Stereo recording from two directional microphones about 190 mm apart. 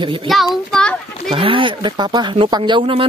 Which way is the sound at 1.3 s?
25° right (ahead or behind).